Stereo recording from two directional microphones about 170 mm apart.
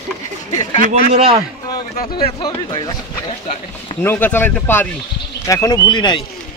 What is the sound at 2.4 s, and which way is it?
Speech, 25° left (ahead or behind).